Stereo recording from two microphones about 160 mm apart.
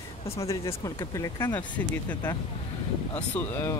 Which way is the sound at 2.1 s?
25° left (ahead or behind).